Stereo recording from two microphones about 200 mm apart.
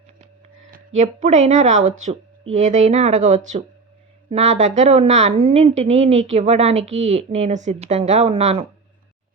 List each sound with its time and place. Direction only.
0.7 s speech: 35° right (ahead or behind)